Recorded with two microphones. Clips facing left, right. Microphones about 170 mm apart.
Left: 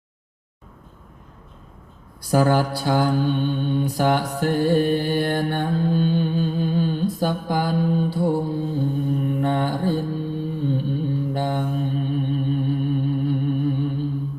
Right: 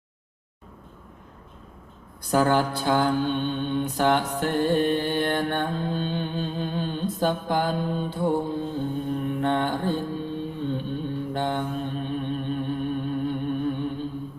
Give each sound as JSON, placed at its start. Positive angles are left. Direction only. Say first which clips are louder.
{"t": 2.3, "sound": "mantra", "louder": "left 2 dB", "side_deg": 10}
{"t": 4.4, "sound": "music", "louder": "left 3 dB", "side_deg": 10}
{"t": 8.4, "sound": "mantra", "louder": "left 3 dB", "side_deg": 10}
{"t": 11.4, "sound": "mantra", "louder": "left 2 dB", "side_deg": 45}
{"t": 11.7, "sound": "humming", "louder": "left 4 dB", "side_deg": 10}